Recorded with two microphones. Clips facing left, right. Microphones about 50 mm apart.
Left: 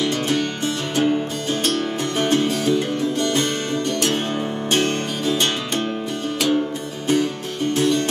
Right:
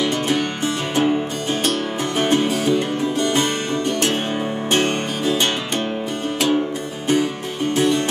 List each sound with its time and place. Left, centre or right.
0.0 s music: centre
4.7 s music: centre
7.7 s music: centre